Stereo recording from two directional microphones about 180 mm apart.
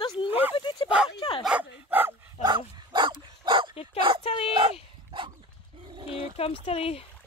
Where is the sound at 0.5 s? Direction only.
25° left (ahead or behind).